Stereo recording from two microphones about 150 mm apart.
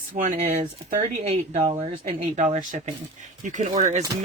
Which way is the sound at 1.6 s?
35° right (ahead or behind).